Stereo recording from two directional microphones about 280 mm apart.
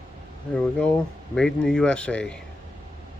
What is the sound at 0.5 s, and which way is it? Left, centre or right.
Speech, centre.